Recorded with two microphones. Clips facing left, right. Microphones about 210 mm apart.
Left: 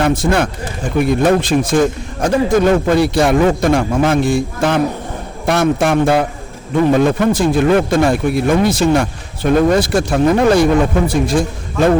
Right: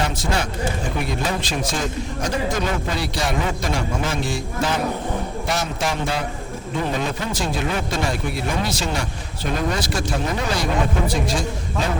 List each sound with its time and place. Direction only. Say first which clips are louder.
0.0 s a man's voice: left 9 dB; 55° left (ahead or behind)